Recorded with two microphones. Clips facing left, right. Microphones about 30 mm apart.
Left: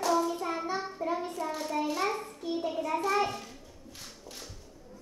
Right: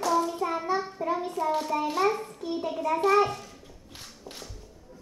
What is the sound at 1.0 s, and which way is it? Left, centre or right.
Child singing, right.